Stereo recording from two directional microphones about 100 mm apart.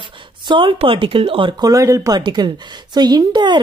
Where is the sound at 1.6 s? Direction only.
35° right (ahead or behind).